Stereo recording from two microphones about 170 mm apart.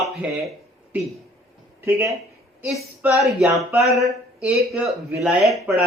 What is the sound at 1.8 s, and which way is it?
Speech, 15° right (ahead or behind).